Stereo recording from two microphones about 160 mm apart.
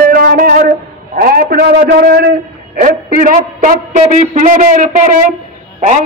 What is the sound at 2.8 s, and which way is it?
A man's voice, 60° right (ahead or behind).